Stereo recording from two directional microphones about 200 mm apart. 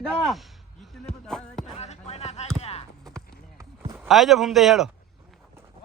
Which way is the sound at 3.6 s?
10° right (ahead or behind).